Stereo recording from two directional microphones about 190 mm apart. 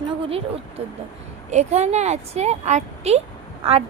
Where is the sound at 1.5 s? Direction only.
35° right (ahead or behind).